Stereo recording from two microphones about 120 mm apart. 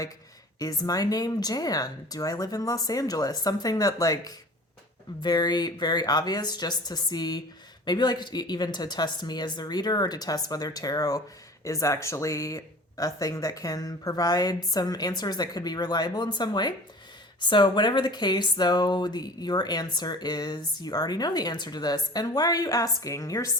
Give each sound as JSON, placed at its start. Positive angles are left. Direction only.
{"t": 0.6, "sound": "speech", "side_deg": 30}